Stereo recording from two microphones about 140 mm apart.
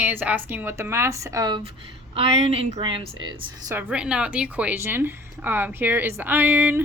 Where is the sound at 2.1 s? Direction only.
50° right (ahead or behind).